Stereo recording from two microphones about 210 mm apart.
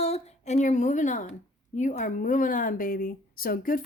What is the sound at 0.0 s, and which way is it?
A woman's voice, 30° left (ahead or behind).